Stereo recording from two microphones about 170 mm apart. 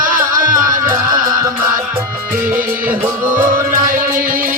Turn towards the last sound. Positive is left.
turn(degrees=-55)  # may be behind; listen again after turning